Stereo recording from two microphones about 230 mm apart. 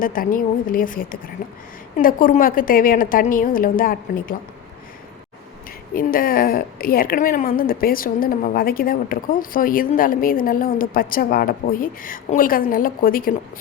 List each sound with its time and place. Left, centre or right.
0.0 s a woman's voice: left
5.9 s a woman's voice: left